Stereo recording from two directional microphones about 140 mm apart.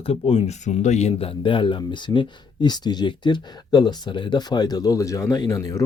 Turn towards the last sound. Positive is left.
turn(degrees=25)  # may be behind; listen again after turning